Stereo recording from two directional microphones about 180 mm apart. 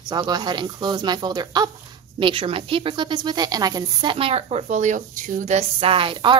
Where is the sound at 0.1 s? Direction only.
25° right (ahead or behind).